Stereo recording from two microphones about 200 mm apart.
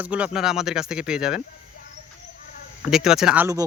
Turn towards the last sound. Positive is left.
turn(degrees=-10)  # may be behind; listen again after turning